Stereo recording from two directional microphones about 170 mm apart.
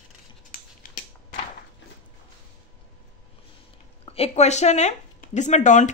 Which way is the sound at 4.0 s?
35° left (ahead or behind).